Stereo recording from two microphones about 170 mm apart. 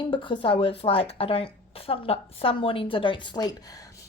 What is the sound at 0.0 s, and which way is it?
A woman's voice, 30° left (ahead or behind).